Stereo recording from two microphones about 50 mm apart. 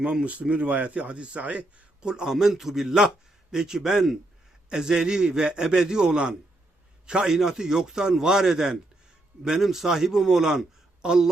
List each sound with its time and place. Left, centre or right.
0.0 s speech: right
2.0 s a man's voice: centre